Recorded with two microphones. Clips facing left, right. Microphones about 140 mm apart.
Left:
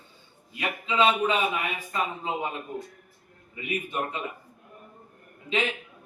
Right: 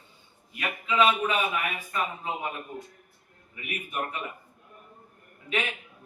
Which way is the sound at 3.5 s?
25° left (ahead or behind).